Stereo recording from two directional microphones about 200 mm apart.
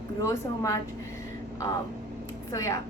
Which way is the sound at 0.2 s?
15° left (ahead or behind).